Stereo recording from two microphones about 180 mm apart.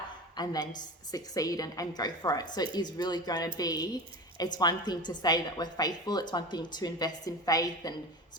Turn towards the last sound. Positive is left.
turn(degrees=20)  # may be behind; listen again after turning